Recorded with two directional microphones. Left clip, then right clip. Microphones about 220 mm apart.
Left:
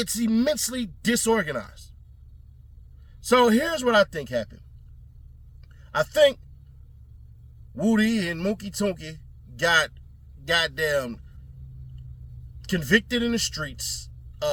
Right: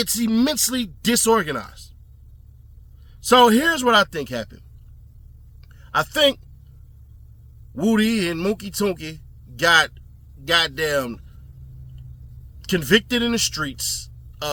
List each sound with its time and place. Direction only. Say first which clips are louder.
0.0 s speech: right 3 dB; 15° right (ahead or behind)
3.2 s speech: right 5 dB; 15° right (ahead or behind)
5.6 s a sound: right 3 dB; 15° right (ahead or behind)
7.8 s speech: right 3 dB; 15° right (ahead or behind)
12.6 s speech: right 4 dB; 15° right (ahead or behind)